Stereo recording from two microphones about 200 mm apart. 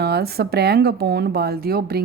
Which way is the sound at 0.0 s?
50° right (ahead or behind).